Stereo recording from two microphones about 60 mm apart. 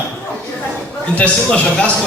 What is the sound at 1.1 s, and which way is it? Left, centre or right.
Speech, left.